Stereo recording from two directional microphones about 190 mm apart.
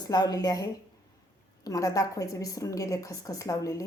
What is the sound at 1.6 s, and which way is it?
Speech, 20° left (ahead or behind).